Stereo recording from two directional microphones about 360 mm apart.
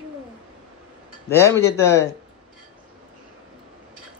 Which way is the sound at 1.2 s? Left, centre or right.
Centre.